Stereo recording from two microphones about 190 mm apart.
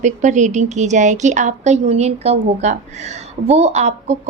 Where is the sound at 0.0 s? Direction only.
40° right (ahead or behind).